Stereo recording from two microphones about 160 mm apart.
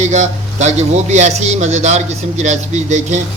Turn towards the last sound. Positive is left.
turn(degrees=-45)  # may be behind; listen again after turning